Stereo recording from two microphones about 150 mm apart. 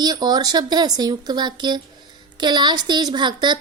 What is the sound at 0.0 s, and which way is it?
A woman's voice, 25° right (ahead or behind).